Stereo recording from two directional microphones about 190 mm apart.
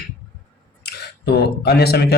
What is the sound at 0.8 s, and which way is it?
Speech, 55° left (ahead or behind).